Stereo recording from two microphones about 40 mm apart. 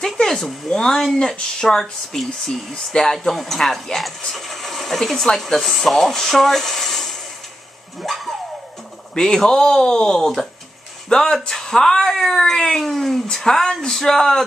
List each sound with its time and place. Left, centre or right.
0.0 s speech: centre
2.1 s speech: centre
2.7 s speech: centre
8.0 s dog: centre
9.1 s speech: centre